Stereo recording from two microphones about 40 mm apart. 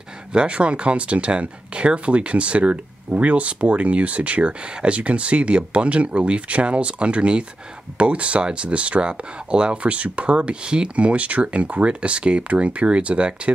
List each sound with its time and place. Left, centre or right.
0.3 s speech: right